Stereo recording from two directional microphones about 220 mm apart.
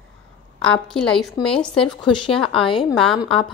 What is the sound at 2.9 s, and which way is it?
Speech, centre (ahead or behind).